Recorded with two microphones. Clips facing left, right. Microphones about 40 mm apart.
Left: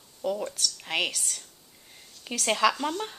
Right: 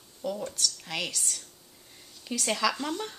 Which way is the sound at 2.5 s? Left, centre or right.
Left.